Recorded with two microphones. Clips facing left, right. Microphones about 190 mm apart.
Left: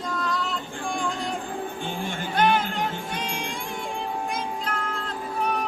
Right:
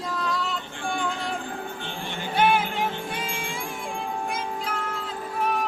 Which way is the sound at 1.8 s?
45° left (ahead or behind).